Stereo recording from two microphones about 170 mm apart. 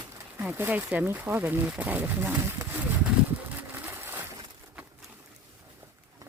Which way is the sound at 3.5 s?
10° right (ahead or behind).